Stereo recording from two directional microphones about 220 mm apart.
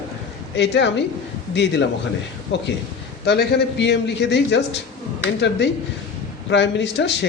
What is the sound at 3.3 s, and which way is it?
A man's voice, 50° left (ahead or behind).